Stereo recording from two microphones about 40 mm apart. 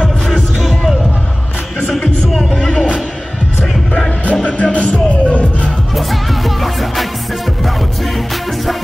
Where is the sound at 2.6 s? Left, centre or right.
Centre.